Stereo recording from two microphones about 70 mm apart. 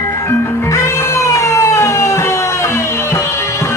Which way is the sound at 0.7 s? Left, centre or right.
Left.